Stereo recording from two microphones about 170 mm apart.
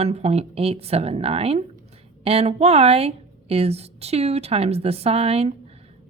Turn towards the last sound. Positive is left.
turn(degrees=-35)  # may be behind; listen again after turning